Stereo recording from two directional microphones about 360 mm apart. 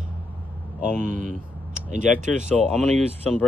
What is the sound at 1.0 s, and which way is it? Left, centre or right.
Speech, right.